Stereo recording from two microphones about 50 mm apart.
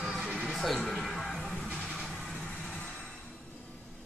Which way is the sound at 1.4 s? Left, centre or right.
Centre.